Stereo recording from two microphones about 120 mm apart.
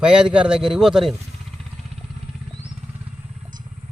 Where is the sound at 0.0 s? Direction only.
10° right (ahead or behind).